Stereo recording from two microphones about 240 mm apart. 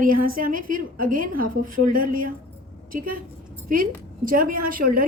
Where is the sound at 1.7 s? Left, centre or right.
Right.